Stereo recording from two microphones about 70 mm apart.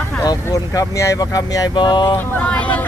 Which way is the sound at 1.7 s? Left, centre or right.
Left.